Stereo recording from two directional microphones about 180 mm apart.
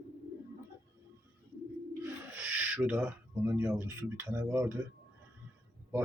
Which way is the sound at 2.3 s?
10° right (ahead or behind).